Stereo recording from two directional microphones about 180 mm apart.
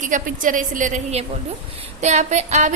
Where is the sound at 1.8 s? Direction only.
40° right (ahead or behind).